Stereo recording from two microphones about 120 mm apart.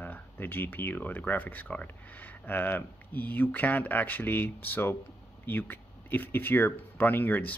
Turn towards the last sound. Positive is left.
turn(degrees=15)  # may be behind; listen again after turning